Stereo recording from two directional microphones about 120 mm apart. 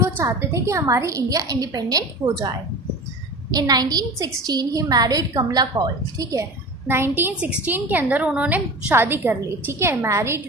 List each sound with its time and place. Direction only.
0.0 s a woman's voice: 25° right (ahead or behind)
3.5 s a woman's voice: 35° right (ahead or behind)
6.9 s a woman's voice: 20° right (ahead or behind)